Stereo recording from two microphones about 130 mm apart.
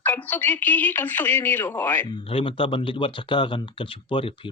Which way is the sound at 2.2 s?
45° left (ahead or behind).